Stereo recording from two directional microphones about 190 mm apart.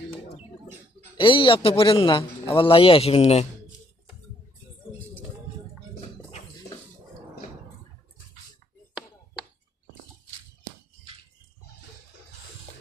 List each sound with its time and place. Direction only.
1.1 s a man's voice: 25° left (ahead or behind)